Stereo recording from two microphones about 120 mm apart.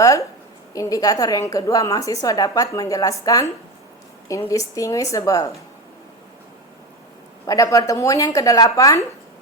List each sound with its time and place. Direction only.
0.0 s a woman's voice: 25° left (ahead or behind)
7.4 s a woman's voice: 30° left (ahead or behind)